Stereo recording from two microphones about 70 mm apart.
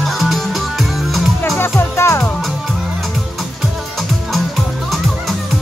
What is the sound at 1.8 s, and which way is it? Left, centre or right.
Music, left.